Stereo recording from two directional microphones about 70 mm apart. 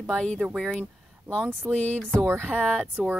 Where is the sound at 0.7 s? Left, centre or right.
Right.